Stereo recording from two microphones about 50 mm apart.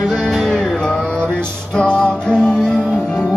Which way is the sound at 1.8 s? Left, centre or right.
Centre.